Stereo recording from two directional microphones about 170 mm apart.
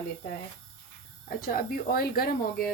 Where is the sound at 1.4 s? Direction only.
60° left (ahead or behind).